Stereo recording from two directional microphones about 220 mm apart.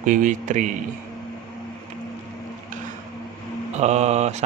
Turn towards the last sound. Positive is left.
turn(degrees=-30)  # may be behind; listen again after turning